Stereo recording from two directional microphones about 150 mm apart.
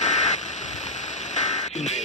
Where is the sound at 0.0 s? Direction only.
50° left (ahead or behind).